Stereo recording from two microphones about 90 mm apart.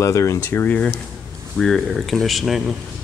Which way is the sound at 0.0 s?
35° left (ahead or behind).